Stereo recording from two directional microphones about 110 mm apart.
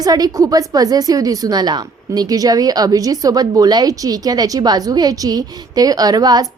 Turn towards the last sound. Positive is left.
turn(degrees=-35)  # may be behind; listen again after turning